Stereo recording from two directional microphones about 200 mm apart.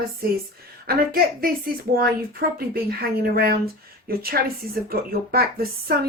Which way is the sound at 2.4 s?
50° right (ahead or behind).